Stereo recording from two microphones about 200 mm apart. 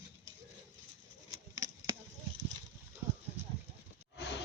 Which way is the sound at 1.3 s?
15° right (ahead or behind).